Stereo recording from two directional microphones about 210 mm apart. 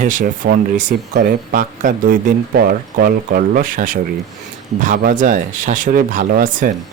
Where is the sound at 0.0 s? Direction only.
40° right (ahead or behind).